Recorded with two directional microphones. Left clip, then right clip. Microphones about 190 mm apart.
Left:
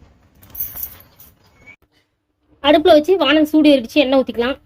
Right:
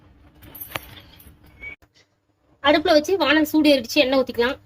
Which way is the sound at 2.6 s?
50° left (ahead or behind).